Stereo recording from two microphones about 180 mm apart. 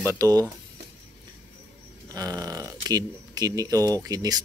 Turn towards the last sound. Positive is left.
turn(degrees=-20)  # may be behind; listen again after turning